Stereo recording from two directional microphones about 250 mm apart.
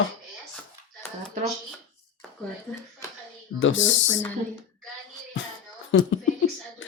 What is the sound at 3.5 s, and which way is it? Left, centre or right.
Speech, left.